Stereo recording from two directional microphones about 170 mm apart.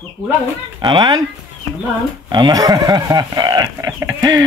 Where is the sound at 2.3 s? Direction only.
25° right (ahead or behind).